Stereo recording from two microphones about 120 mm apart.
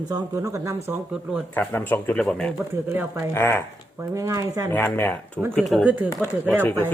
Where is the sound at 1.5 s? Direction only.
15° left (ahead or behind).